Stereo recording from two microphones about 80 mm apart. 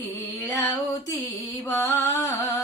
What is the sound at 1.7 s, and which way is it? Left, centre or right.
Music, left.